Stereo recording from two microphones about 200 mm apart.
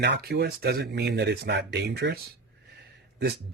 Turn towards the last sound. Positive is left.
turn(degrees=-55)  # may be behind; listen again after turning